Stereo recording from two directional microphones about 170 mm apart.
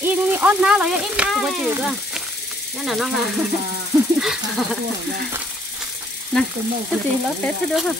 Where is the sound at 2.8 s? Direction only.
Centre (ahead or behind).